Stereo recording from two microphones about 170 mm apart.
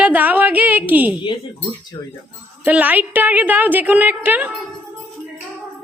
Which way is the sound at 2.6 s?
10° right (ahead or behind).